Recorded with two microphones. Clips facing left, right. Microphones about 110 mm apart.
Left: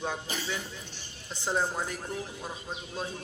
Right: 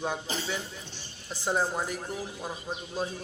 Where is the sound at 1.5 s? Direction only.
15° right (ahead or behind).